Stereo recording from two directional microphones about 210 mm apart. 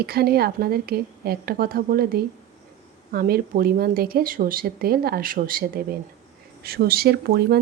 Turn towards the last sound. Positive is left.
turn(degrees=-50)  # may be behind; listen again after turning